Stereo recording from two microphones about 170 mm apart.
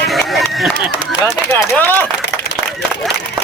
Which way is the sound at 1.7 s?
10° left (ahead or behind).